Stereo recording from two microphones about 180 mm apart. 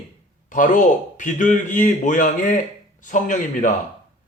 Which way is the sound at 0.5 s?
45° left (ahead or behind).